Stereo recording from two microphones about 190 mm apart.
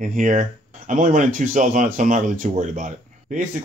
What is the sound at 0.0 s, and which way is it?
Speech, 40° right (ahead or behind).